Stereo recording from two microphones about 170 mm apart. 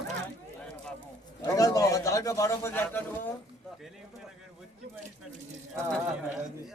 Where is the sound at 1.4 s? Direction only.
20° left (ahead or behind).